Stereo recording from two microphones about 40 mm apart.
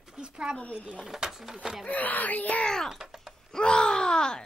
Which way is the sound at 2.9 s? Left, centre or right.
Centre.